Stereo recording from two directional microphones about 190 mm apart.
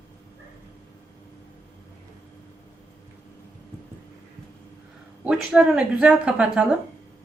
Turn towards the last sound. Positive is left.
turn(degrees=-5)  # may be behind; listen again after turning